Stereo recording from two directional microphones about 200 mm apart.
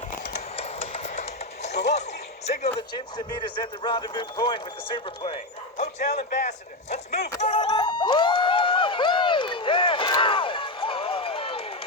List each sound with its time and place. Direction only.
0.3 s a sound: 30° left (ahead or behind)
1.7 s music: 60° left (ahead or behind)
2.5 s speech: 35° left (ahead or behind)
2.9 s a man's voice: 25° left (ahead or behind)
6.0 s speech: 35° left (ahead or behind)
7.4 s a sound: 25° left (ahead or behind)